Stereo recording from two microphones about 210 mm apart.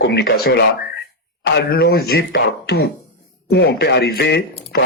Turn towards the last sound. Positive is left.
turn(degrees=50)  # may be behind; listen again after turning